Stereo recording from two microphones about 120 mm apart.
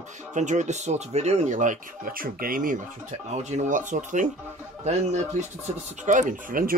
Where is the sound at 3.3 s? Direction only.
70° right (ahead or behind); by 4.2 s 90° right.